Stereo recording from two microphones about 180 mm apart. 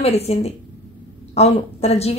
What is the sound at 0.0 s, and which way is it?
A woman's voice, 35° left (ahead or behind).